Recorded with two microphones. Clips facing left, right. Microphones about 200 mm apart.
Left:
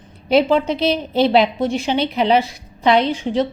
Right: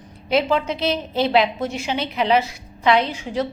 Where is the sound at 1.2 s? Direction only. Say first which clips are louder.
Left 3 dB; 30° left (ahead or behind).